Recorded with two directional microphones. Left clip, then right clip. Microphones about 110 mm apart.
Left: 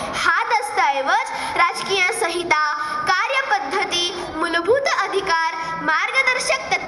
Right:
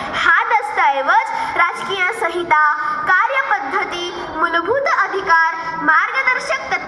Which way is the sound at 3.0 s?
25° left (ahead or behind).